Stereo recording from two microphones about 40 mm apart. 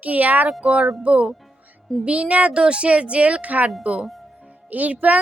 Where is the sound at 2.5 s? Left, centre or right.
Right.